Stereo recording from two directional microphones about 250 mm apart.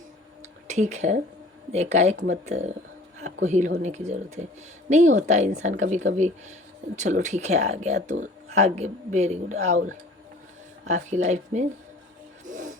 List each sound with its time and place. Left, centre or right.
0.7 s speech: right
10.8 s speech: right
12.5 s music: right